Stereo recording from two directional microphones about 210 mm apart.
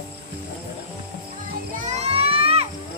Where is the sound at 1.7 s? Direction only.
35° right (ahead or behind).